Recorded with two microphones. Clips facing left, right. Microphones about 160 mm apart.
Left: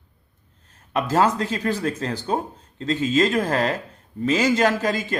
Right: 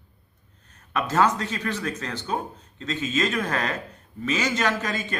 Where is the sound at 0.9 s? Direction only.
30° left (ahead or behind).